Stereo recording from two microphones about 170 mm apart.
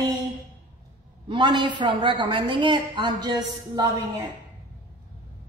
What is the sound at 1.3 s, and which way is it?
A woman's voice, 25° right (ahead or behind).